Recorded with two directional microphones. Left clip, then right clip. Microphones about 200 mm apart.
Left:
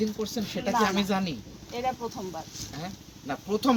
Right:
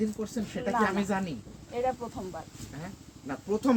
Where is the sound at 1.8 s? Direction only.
40° right (ahead or behind).